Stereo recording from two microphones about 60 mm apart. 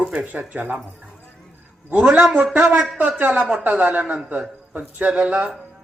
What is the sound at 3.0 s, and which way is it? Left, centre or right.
Speech, right.